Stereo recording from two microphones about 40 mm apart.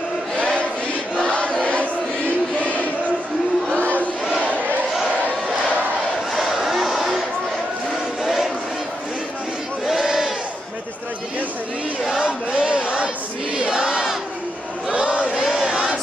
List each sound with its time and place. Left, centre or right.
0.4 s a sound: left
6.3 s a sound: centre
8.2 s crowd: centre
9.8 s battle cry: centre
12.3 s crowd: right
14.9 s choir: right
15.5 s crowd: centre